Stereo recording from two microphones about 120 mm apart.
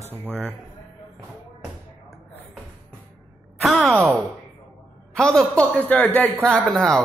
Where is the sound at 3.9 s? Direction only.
20° right (ahead or behind).